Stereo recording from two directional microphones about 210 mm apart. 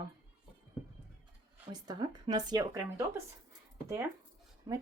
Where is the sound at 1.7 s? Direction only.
20° right (ahead or behind).